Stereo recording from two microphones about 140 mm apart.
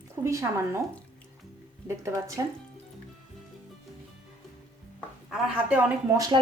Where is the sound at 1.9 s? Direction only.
20° right (ahead or behind).